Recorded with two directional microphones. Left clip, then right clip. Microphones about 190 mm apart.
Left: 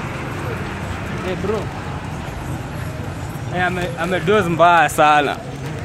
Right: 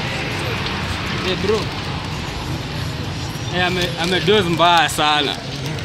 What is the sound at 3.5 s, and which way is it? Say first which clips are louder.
Speech: right 1 dB; 30° left (ahead or behind).